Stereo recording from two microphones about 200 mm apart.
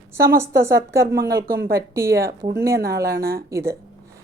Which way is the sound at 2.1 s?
50° right (ahead or behind).